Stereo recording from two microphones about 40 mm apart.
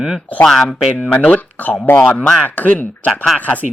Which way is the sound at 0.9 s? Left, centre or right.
Left.